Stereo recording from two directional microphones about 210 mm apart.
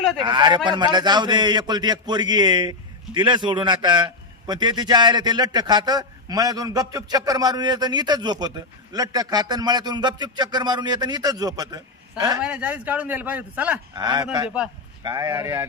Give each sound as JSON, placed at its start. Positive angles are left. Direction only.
{"t": 0.3, "sound": "a man's voice", "side_deg": -20}
{"t": 12.4, "sound": "a man's voice", "side_deg": -5}
{"t": 13.9, "sound": "a man's voice", "side_deg": -20}